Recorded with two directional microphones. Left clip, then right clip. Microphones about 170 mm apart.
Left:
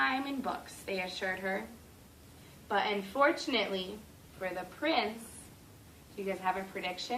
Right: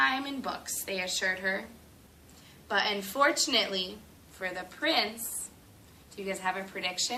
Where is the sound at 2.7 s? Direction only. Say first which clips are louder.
Right 2 dB; 50° right (ahead or behind).